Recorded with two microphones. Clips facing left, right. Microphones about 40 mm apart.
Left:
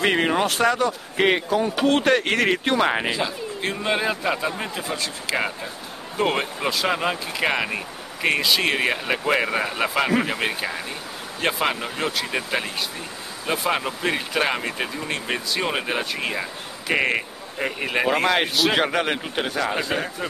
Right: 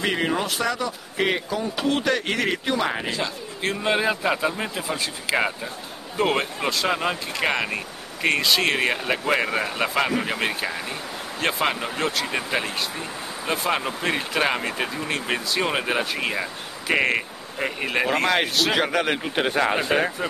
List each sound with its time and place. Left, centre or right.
0.0 s speech: left
1.1 s speech: left
1.9 s speech: left
3.2 s speech: centre
19.8 s speech: right